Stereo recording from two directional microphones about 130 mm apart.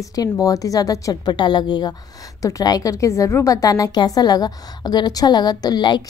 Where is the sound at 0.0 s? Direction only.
25° left (ahead or behind).